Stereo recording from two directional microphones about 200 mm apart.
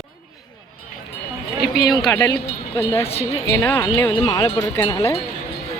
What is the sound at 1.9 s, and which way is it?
Speech, centre (ahead or behind).